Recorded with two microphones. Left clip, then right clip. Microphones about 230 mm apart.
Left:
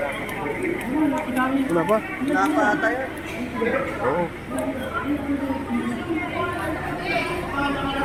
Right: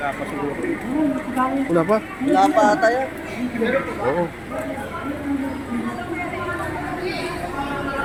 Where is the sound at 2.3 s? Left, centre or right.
Right.